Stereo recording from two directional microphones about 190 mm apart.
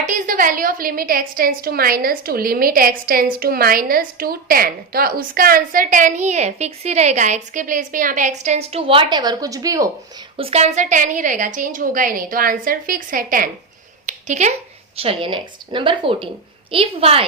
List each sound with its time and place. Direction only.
0.0 s a woman's voice: 45° right (ahead or behind); by 9.9 s 15° right (ahead or behind)
10.3 s a woman's voice: 30° right (ahead or behind)